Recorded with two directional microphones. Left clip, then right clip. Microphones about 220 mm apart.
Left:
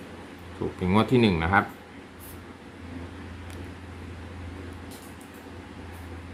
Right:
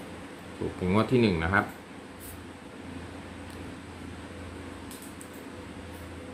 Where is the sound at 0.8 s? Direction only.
15° left (ahead or behind).